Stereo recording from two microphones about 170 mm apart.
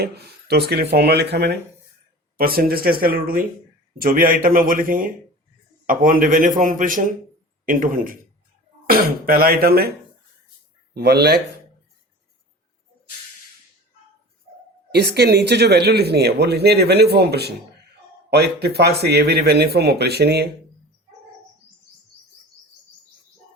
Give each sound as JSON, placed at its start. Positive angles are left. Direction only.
{"t": 0.0, "sound": "speech", "side_deg": -70}
{"t": 2.4, "sound": "a man's voice", "side_deg": -60}
{"t": 10.9, "sound": "speech", "side_deg": -70}
{"t": 14.9, "sound": "speech", "side_deg": -75}